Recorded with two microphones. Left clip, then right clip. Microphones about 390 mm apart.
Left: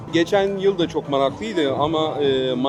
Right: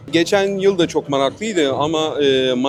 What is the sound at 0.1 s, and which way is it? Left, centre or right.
A man's voice, right.